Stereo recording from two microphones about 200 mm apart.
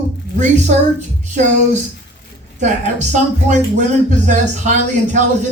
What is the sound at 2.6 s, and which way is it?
Speech, 35° right (ahead or behind).